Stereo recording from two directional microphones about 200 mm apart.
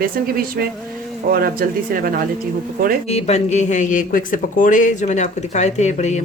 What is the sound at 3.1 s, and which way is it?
Speech, 30° left (ahead or behind).